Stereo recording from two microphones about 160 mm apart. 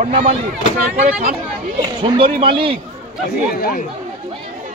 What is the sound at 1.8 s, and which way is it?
A man's voice, 35° right (ahead or behind).